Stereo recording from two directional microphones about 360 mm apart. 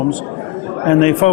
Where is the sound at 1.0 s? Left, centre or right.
Centre.